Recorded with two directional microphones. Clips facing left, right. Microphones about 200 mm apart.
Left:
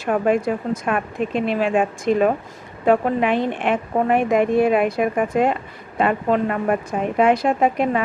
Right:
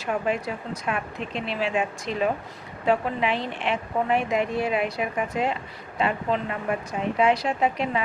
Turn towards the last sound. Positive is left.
turn(degrees=50)  # may be behind; listen again after turning